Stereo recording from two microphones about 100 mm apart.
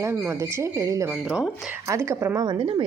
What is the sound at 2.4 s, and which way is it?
Speech, 45° right (ahead or behind).